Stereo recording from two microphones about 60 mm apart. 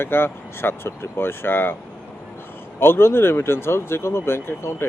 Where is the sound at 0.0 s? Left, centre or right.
Left.